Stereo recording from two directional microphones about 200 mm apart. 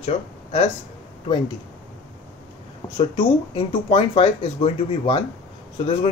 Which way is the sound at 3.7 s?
25° left (ahead or behind).